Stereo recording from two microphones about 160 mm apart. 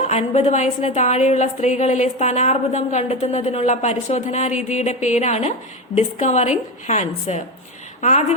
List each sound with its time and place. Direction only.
0.1 s a woman's voice: 45° left (ahead or behind)